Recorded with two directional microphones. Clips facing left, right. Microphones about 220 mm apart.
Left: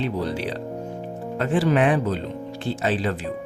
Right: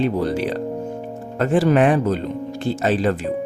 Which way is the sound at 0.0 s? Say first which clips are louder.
Right 5 dB; 45° right (ahead or behind).